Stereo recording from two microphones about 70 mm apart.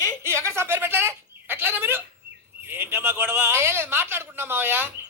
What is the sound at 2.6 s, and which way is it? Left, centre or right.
A man's voice, right.